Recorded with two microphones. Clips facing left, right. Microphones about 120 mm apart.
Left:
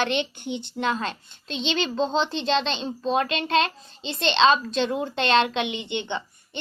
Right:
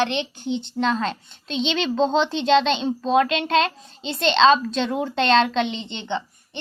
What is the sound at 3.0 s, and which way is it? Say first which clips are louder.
A child's voice: right 3 dB; 40° right (ahead or behind).